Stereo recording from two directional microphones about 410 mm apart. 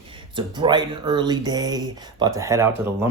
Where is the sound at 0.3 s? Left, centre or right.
Centre.